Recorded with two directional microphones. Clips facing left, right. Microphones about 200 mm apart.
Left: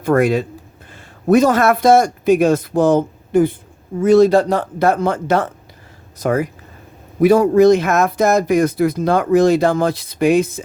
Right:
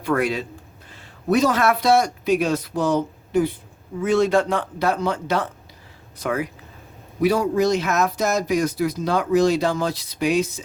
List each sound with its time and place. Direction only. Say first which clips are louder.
0.0 s a man's voice: left 7 dB; 45° left (ahead or behind)
4.0 s speech: left 7 dB; 40° left (ahead or behind)